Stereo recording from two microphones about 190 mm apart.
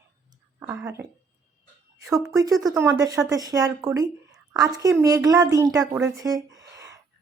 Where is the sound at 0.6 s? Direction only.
15° right (ahead or behind).